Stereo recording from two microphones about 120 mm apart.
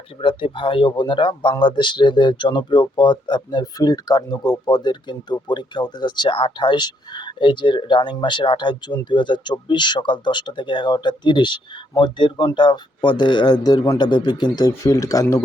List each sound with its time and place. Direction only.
0.2 s speech: 45° left (ahead or behind); by 15.4 s 25° left (ahead or behind)